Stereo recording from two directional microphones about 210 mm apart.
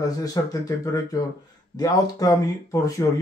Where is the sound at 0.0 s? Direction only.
15° left (ahead or behind).